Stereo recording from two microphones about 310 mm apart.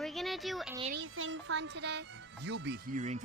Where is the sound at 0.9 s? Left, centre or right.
Right.